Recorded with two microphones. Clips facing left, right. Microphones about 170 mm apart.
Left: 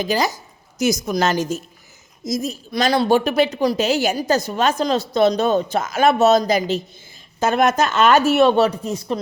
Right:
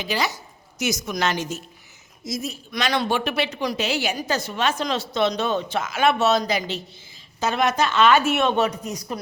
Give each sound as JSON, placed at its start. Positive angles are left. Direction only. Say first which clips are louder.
{"t": 0.0, "sound": "speech", "louder": "left 5 dB", "side_deg": 40}